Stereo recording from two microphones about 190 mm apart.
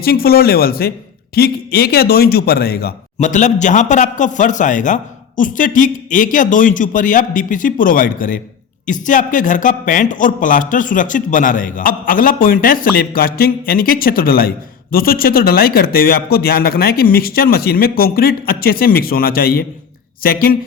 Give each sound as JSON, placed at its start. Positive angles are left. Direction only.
{"t": 0.0, "sound": "a man's voice", "side_deg": 55}
{"t": 3.2, "sound": "a man's voice", "side_deg": 40}